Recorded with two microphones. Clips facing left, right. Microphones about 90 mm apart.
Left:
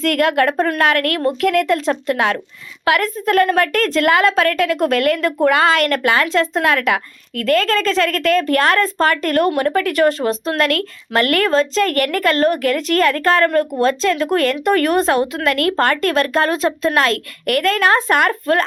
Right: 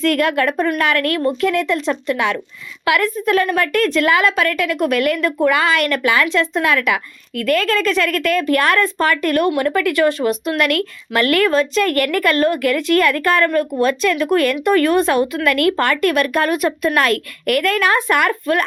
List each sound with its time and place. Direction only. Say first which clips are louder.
0.0 s a woman's voice: left 1 dB; 35° left (ahead or behind)
1.4 s speech: left 5 dB; 60° left (ahead or behind)
1.6 s a woman's voice: left 2 dB; 40° left (ahead or behind)